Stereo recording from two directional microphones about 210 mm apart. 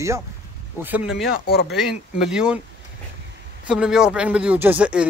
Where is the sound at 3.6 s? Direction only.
5° right (ahead or behind).